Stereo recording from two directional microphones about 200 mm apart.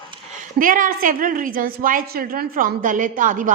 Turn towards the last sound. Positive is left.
turn(degrees=-40)  # may be behind; listen again after turning